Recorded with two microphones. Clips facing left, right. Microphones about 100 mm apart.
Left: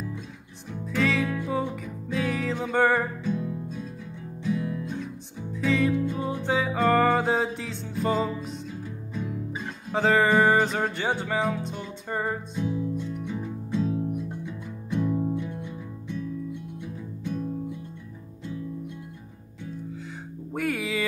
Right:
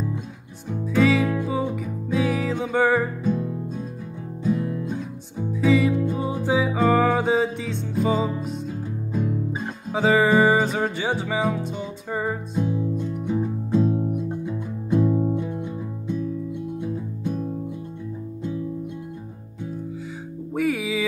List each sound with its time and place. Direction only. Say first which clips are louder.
0.8 s music: right 6 dB; 5° right (ahead or behind)
3.3 s music: right 4 dB; 40° right (ahead or behind)
5.5 s music: right 5 dB; 5° right (ahead or behind)
6.1 s music: right 3 dB; 20° right (ahead or behind)
6.4 s music: right 3 dB; 5° right (ahead or behind)
9.9 s music: right 3 dB; 5° right (ahead or behind)
12.5 s music: right 6 dB; 35° right (ahead or behind)
15.0 s music: right 5 dB; 25° right (ahead or behind)
15.3 s music: right 5 dB; 40° right (ahead or behind)
16.8 s music: right 7 dB; 40° right (ahead or behind)
20.5 s music: right 4 dB; centre (ahead or behind)